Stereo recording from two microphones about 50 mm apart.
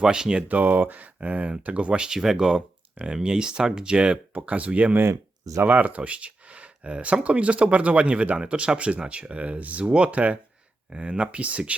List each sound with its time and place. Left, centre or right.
0.0 s speech: centre
0.4 s speech: right